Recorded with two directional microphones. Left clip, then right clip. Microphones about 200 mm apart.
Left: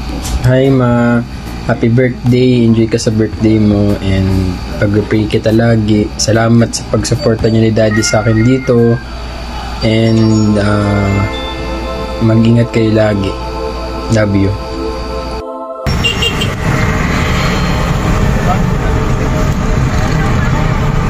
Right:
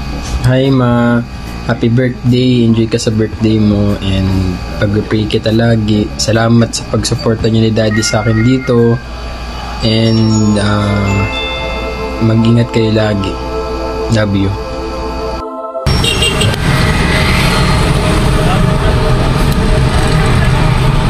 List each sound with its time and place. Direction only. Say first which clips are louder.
0.5 s speech: left 1 dB; 5° right (ahead or behind)
4.7 s speech: left 2 dB; centre (ahead or behind)
12.4 s speech: even; centre (ahead or behind)